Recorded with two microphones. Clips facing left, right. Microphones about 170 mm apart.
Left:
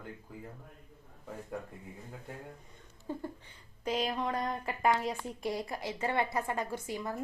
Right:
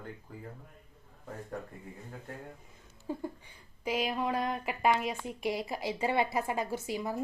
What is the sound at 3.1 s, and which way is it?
Speech, 10° right (ahead or behind).